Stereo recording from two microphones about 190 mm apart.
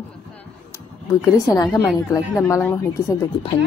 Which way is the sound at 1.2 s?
15° left (ahead or behind).